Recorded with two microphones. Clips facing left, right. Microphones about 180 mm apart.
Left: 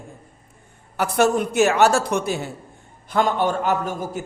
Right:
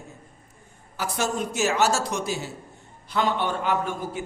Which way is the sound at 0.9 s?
60° left (ahead or behind).